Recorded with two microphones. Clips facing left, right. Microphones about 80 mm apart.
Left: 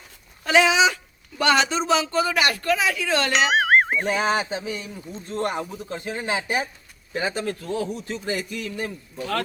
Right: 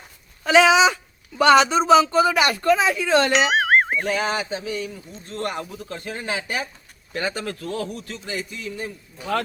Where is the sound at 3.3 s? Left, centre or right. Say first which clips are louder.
Right 1 dB; centre.